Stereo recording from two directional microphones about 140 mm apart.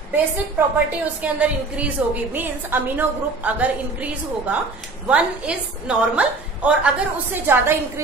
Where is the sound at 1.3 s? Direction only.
10° right (ahead or behind).